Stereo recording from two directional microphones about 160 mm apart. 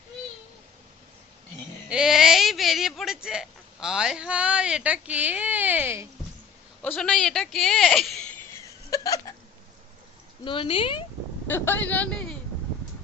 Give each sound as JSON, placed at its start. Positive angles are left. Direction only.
{"t": 1.9, "sound": "speech", "side_deg": -5}
{"t": 6.8, "sound": "speech", "side_deg": 5}
{"t": 10.4, "sound": "speech", "side_deg": 30}
{"t": 11.4, "sound": "speech", "side_deg": 15}